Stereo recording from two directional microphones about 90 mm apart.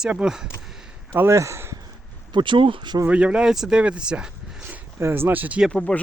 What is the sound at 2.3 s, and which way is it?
Speech, 65° right (ahead or behind).